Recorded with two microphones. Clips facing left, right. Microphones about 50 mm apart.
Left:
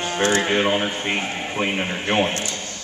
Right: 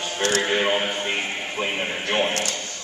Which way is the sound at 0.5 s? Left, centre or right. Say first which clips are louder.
Left 2 dB; centre.